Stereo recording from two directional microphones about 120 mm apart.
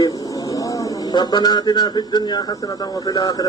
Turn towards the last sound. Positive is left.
turn(degrees=30)  # may be behind; listen again after turning